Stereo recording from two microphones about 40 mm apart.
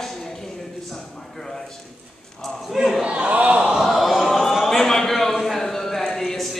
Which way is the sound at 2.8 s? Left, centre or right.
Centre.